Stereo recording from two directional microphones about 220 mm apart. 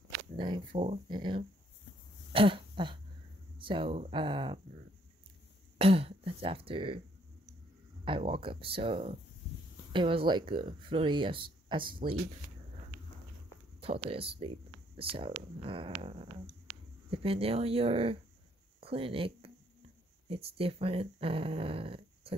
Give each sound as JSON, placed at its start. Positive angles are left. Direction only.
{"t": 0.4, "sound": "speech", "side_deg": -20}
{"t": 2.3, "sound": "cough", "side_deg": -25}
{"t": 3.5, "sound": "speech", "side_deg": -25}
{"t": 5.8, "sound": "speech", "side_deg": -25}
{"t": 8.0, "sound": "speech", "side_deg": -25}
{"t": 13.7, "sound": "speech", "side_deg": -25}